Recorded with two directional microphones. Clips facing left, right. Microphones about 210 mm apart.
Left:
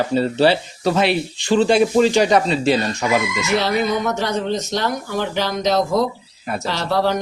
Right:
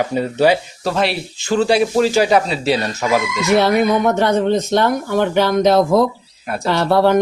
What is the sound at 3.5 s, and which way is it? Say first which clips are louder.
Speech: right 6 dB; 55° right (ahead or behind).